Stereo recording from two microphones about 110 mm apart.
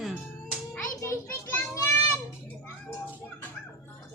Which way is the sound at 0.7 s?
25° left (ahead or behind).